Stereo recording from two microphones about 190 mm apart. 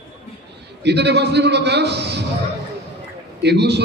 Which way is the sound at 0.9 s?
60° right (ahead or behind).